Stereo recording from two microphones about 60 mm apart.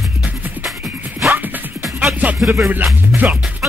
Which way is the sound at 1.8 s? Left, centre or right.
Centre.